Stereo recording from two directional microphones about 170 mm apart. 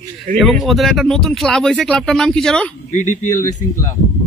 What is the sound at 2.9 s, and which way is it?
Speech, 45° left (ahead or behind).